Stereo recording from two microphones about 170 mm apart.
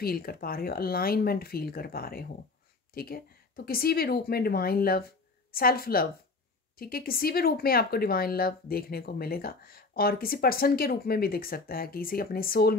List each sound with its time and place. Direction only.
0.0 s a woman's voice: 65° left (ahead or behind)